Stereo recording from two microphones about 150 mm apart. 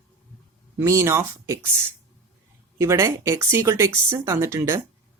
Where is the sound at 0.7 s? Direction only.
20° right (ahead or behind).